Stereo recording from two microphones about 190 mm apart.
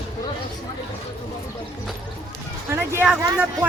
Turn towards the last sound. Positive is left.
turn(degrees=-10)  # may be behind; listen again after turning